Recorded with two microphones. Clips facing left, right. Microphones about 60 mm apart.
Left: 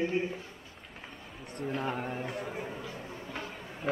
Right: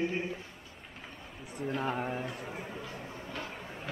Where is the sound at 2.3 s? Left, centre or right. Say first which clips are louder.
Left 3 dB; centre.